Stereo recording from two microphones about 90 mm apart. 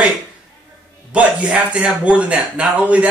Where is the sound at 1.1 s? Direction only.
10° right (ahead or behind).